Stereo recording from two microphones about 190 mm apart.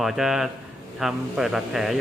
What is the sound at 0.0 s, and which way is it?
A man's voice, centre (ahead or behind).